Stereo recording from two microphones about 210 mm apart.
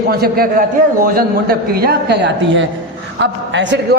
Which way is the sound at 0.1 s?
45° right (ahead or behind).